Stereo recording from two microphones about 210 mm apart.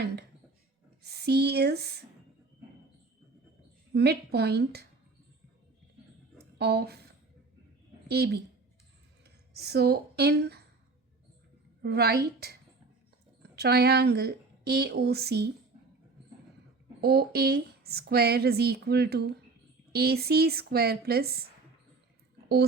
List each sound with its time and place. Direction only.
1.0 s speech: 50° right (ahead or behind)
3.9 s speech: 50° right (ahead or behind)
6.6 s speech: 50° right (ahead or behind)
8.0 s a woman's voice: 50° right (ahead or behind)
11.8 s speech: 50° right (ahead or behind)
17.0 s speech: 50° right (ahead or behind)